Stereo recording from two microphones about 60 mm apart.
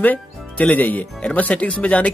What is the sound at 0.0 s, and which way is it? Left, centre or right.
Speech, left.